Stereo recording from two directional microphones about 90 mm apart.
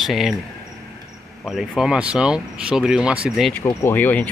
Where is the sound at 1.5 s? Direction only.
5° right (ahead or behind).